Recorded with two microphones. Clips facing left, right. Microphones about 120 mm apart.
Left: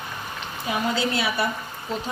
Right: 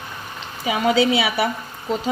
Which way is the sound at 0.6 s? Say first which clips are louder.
Right 7 dB; 90° right.